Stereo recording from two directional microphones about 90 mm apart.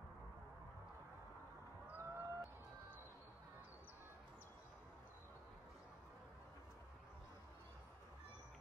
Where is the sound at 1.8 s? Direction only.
25° right (ahead or behind).